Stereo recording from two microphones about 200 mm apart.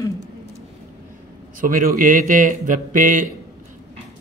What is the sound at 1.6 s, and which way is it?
A man's voice, 45° right (ahead or behind).